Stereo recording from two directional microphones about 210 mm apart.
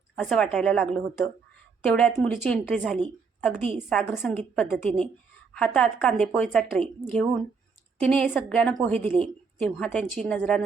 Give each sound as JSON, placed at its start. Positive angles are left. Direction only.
{"t": 0.2, "sound": "a woman's voice", "side_deg": 5}